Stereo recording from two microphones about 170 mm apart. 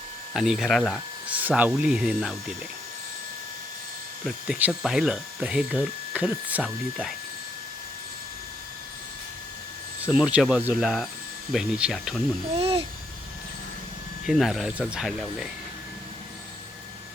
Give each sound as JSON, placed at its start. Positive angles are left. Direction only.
{"t": 0.3, "sound": "speech", "side_deg": 0}
{"t": 1.4, "sound": "speech", "side_deg": -10}
{"t": 4.2, "sound": "speech", "side_deg": -5}
{"t": 10.0, "sound": "speech", "side_deg": -5}
{"t": 12.5, "sound": "babbling", "side_deg": -35}
{"t": 14.3, "sound": "speech", "side_deg": 0}